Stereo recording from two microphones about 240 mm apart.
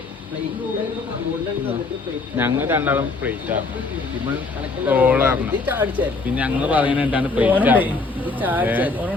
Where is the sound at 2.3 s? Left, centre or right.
Centre.